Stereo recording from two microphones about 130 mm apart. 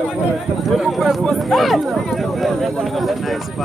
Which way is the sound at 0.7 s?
Centre (ahead or behind).